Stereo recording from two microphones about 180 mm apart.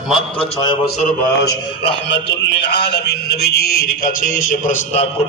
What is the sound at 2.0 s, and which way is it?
Speech, 75° left (ahead or behind).